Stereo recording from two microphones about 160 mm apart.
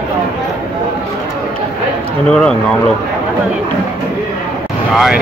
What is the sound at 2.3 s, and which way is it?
Speech, 5° left (ahead or behind).